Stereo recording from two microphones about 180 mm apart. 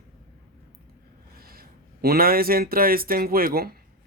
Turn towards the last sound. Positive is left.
turn(degrees=-55)  # may be behind; listen again after turning